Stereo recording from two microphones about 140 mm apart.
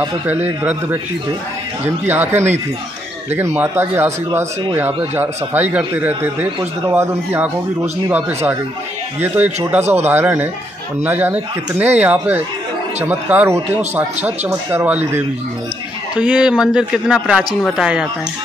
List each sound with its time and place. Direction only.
2.0 s a man's voice: 15° right (ahead or behind)
9.2 s a man's voice: 15° right (ahead or behind)
16.2 s a man's voice: 5° right (ahead or behind)